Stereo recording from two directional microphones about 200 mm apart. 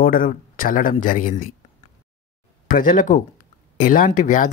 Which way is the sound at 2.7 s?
45° left (ahead or behind).